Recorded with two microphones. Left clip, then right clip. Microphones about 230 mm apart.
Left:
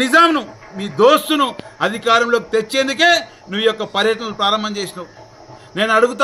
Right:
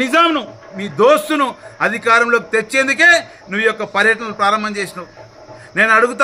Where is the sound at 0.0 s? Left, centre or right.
Centre.